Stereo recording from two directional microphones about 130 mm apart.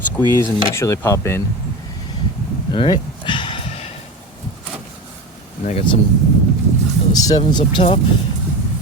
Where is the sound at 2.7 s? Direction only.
40° left (ahead or behind).